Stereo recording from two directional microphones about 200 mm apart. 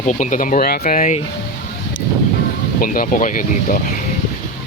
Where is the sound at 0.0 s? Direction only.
40° left (ahead or behind).